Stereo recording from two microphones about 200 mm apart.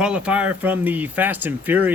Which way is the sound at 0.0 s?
5° right (ahead or behind).